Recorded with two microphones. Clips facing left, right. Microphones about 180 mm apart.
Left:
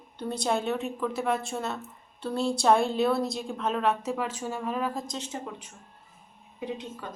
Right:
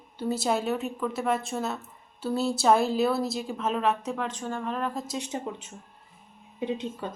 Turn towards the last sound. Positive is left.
turn(degrees=-25)  # may be behind; listen again after turning